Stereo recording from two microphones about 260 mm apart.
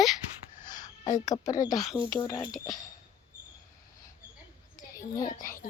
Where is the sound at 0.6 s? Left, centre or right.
Left.